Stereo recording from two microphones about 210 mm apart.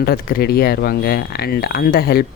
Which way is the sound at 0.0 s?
45° left (ahead or behind).